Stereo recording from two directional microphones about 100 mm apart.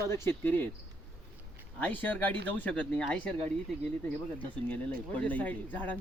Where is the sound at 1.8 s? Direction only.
15° left (ahead or behind).